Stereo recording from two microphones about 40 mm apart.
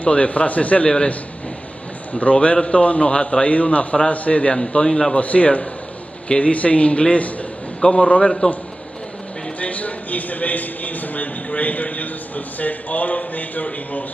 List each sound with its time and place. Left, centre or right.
0.0 s speech: left
0.8 s a man's voice: left
2.3 s a man's voice: left
5.1 s a man's voice: left
9.6 s a sound: left